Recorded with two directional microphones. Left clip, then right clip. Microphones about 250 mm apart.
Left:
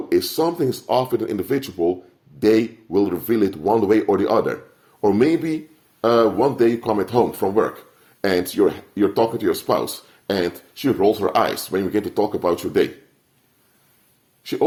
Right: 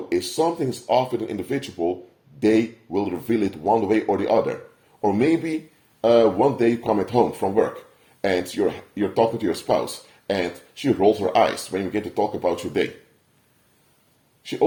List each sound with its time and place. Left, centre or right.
0.1 s a man's voice: left